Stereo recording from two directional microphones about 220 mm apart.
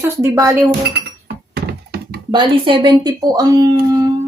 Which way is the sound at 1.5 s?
45° right (ahead or behind).